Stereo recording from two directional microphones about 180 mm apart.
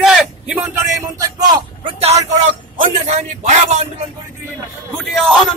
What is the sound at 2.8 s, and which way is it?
A man's voice, 40° right (ahead or behind).